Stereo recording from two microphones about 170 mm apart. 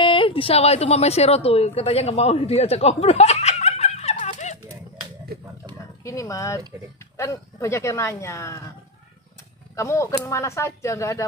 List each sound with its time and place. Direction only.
0.0 s a woman's voice: 30° left (ahead or behind)
5.3 s a sound: 65° right (ahead or behind)
6.0 s speech: 20° left (ahead or behind)
9.8 s speech: 15° left (ahead or behind)